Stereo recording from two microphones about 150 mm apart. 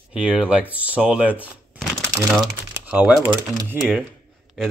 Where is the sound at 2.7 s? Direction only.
10° right (ahead or behind).